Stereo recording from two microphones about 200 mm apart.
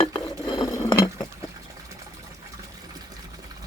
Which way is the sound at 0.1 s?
25° left (ahead or behind).